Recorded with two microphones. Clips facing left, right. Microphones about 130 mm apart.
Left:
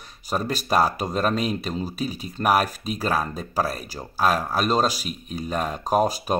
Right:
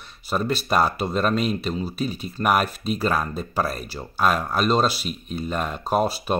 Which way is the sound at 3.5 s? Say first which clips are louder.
Left 1 dB; 40° left (ahead or behind).